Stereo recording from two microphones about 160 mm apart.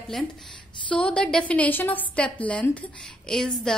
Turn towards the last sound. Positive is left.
turn(degrees=5)  # may be behind; listen again after turning